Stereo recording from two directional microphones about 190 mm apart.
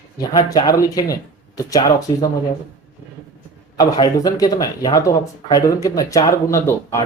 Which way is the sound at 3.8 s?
20° left (ahead or behind).